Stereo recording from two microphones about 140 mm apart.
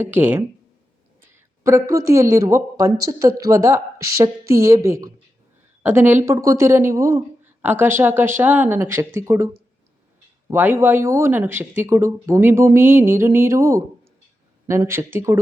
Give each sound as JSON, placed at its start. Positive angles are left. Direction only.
{"t": 0.0, "sound": "speech", "side_deg": -15}
{"t": 1.6, "sound": "speech", "side_deg": -20}
{"t": 10.5, "sound": "speech", "side_deg": -15}